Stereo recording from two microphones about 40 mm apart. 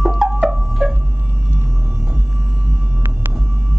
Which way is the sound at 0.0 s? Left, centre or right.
Centre.